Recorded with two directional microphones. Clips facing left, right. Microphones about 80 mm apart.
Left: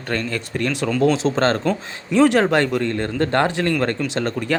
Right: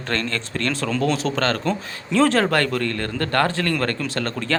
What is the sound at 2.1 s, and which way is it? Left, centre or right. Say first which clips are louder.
Speech: left 3 dB; centre.